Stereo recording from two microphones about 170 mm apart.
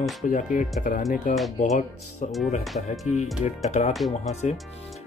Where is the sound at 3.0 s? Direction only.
40° left (ahead or behind).